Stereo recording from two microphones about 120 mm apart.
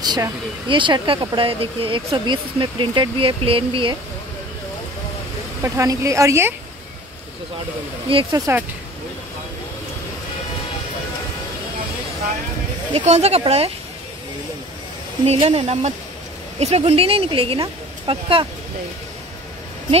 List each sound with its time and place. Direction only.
0.0 s speech: 35° right (ahead or behind)
5.6 s speech: 25° right (ahead or behind)
8.1 s speech: 45° right (ahead or behind)
12.9 s speech: 65° right (ahead or behind)
15.2 s speech: 60° right (ahead or behind)